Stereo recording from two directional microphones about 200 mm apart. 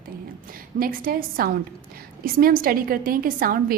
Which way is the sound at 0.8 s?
45° right (ahead or behind).